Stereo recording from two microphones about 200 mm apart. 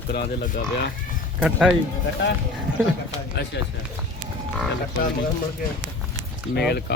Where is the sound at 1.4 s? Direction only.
5° right (ahead or behind).